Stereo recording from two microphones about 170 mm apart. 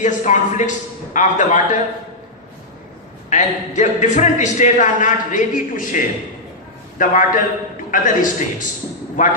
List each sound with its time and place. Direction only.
0.0 s a man's voice: 45° left (ahead or behind)
3.2 s a man's voice: 45° left (ahead or behind)
7.0 s a man's voice: 50° left (ahead or behind)